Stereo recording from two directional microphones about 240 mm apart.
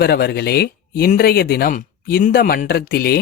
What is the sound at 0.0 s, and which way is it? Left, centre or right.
Speech, left.